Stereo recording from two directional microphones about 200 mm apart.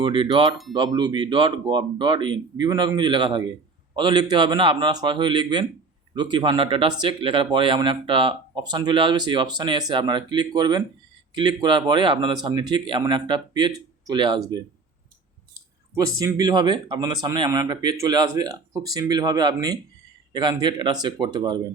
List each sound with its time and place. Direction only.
0.0 s speech: 25° right (ahead or behind)
16.0 s speech: 15° right (ahead or behind)